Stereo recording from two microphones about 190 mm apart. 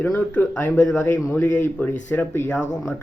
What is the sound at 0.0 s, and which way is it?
Speech, 10° left (ahead or behind).